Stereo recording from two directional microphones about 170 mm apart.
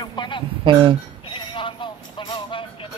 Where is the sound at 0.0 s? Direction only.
25° left (ahead or behind).